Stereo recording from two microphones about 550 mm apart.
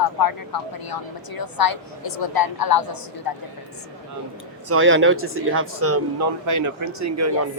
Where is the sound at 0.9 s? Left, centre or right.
Left.